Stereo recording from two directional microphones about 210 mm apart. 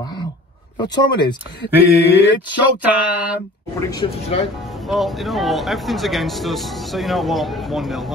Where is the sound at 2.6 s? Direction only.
5° right (ahead or behind).